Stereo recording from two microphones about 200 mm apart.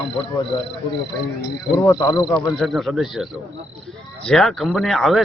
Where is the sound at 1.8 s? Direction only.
20° left (ahead or behind).